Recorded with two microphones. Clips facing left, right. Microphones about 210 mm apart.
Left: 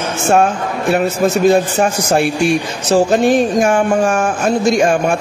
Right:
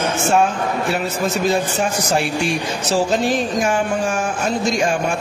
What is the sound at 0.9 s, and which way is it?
Speech, 55° left (ahead or behind).